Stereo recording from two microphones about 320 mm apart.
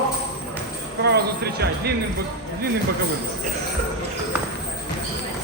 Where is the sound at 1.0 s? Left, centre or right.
Right.